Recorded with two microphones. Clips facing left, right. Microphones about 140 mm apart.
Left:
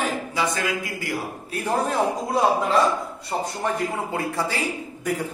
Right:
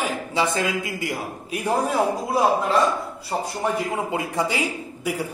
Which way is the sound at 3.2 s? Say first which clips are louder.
Right 2 dB; 15° right (ahead or behind).